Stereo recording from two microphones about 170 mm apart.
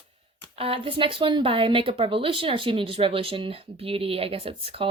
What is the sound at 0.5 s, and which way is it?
Speech, 35° right (ahead or behind).